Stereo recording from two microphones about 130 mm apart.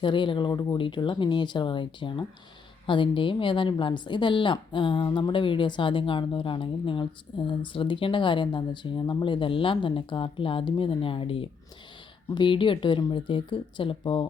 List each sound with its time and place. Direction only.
0.0 s a woman's voice: 40° left (ahead or behind)